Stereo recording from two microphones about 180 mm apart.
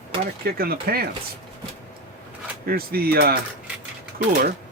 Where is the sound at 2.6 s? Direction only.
55° right (ahead or behind).